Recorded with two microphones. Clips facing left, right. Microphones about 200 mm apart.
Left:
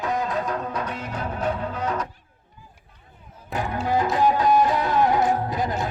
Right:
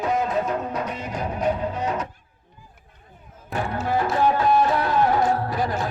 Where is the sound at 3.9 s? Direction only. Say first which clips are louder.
Left 1 dB; 15° left (ahead or behind).